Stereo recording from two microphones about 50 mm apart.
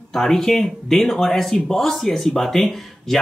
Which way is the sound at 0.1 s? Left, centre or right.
Centre.